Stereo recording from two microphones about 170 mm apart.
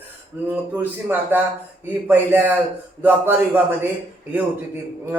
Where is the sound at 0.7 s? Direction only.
10° right (ahead or behind).